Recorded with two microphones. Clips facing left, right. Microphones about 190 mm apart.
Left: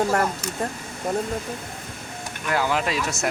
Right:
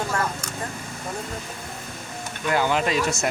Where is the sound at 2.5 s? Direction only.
Centre (ahead or behind).